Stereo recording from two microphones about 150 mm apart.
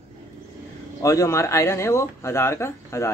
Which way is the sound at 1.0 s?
20° left (ahead or behind).